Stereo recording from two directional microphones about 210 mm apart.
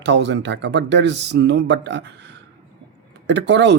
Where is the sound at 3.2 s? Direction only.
55° right (ahead or behind).